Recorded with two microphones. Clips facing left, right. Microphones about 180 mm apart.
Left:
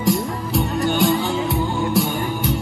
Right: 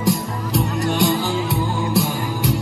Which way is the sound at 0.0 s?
Centre (ahead or behind).